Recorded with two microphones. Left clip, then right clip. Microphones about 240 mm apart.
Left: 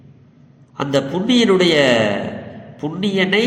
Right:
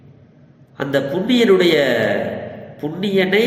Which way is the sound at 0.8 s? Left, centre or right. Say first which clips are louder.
Even; left.